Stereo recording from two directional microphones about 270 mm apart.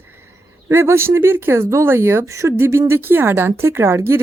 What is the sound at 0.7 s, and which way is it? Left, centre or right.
Speech, centre.